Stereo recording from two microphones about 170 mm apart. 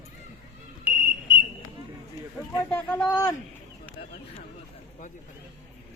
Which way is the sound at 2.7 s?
10° left (ahead or behind).